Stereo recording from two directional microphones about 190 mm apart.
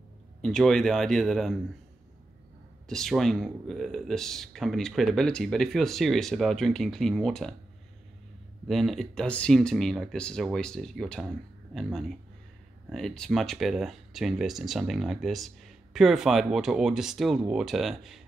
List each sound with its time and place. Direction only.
0.4 s speech: centre (ahead or behind)
2.9 s speech: centre (ahead or behind)
8.6 s speech: centre (ahead or behind)